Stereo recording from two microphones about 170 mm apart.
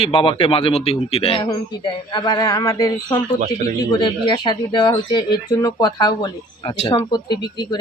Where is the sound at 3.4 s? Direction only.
50° right (ahead or behind).